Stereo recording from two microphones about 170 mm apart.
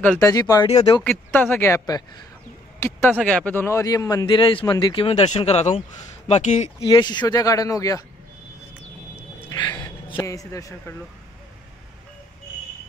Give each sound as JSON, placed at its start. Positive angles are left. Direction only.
{"t": 0.0, "sound": "speech", "side_deg": 15}
{"t": 1.0, "sound": "speech", "side_deg": 10}
{"t": 3.3, "sound": "a man's voice", "side_deg": 5}
{"t": 6.9, "sound": "speech", "side_deg": 25}
{"t": 9.5, "sound": "speech", "side_deg": 20}